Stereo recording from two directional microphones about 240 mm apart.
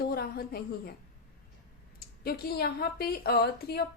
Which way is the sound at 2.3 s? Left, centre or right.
Left.